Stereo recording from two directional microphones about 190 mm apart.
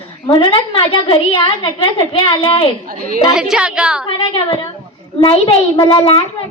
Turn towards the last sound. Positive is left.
turn(degrees=25)  # may be behind; listen again after turning